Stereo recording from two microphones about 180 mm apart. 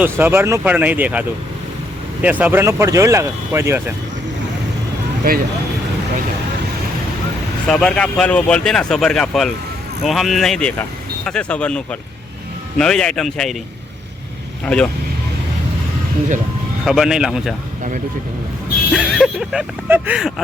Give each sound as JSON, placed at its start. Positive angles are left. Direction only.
{"t": 0.0, "sound": "speech", "side_deg": -10}
{"t": 2.2, "sound": "speech", "side_deg": -10}
{"t": 5.3, "sound": "speech", "side_deg": -55}
{"t": 7.7, "sound": "speech", "side_deg": 5}
{"t": 14.6, "sound": "speech", "side_deg": 5}
{"t": 16.8, "sound": "speech", "side_deg": -5}
{"t": 18.9, "sound": "speech", "side_deg": 0}